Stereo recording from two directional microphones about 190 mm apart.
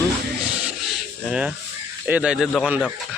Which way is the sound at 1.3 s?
5° right (ahead or behind).